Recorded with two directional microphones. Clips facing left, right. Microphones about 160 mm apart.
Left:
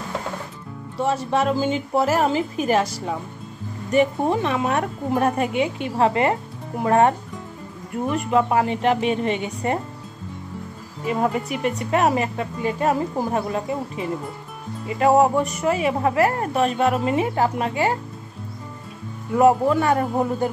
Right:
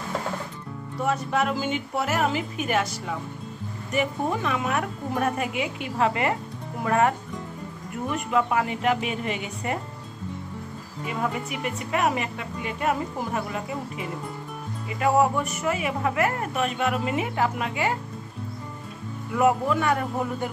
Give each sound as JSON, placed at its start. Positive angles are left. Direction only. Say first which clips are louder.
{"t": 0.9, "sound": "a woman's voice", "louder": "left 4 dB", "side_deg": 30}
{"t": 8.3, "sound": "a woman's voice", "louder": "left 4 dB", "side_deg": 30}
{"t": 11.1, "sound": "a woman's voice", "louder": "left 7 dB", "side_deg": 35}
{"t": 19.3, "sound": "a woman's voice", "louder": "left 5 dB", "side_deg": 35}